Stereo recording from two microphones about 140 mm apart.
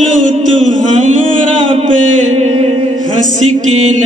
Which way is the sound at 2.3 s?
45° right (ahead or behind).